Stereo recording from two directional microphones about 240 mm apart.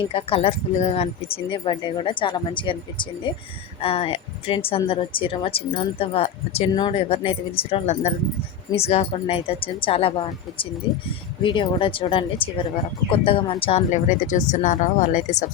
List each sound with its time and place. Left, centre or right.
0.1 s a woman's voice: left